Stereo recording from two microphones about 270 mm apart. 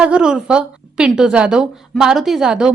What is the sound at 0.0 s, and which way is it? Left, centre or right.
A woman's voice, centre.